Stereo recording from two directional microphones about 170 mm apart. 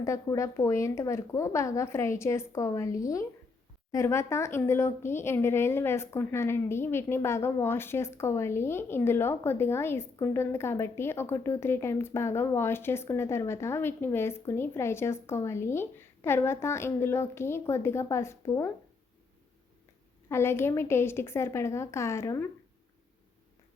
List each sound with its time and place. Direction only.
0.0 s a woman's voice: 20° left (ahead or behind)
20.2 s a woman's voice: 15° left (ahead or behind)